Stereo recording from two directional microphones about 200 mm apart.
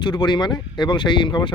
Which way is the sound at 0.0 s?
20° left (ahead or behind).